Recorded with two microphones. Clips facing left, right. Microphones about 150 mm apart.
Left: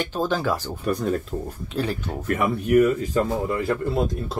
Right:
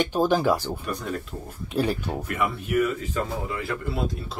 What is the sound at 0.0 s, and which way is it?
Speech, 15° right (ahead or behind).